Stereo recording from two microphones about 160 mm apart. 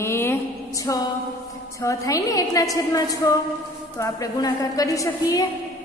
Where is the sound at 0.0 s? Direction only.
15° left (ahead or behind).